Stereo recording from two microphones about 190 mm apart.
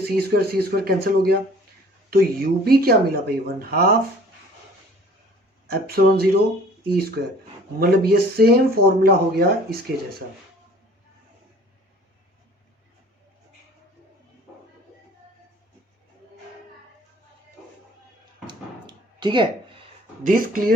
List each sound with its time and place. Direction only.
0.0 s speech: 55° right (ahead or behind)
5.6 s speech: 55° right (ahead or behind)
18.4 s a sound: 25° right (ahead or behind)
20.2 s speech: 50° right (ahead or behind)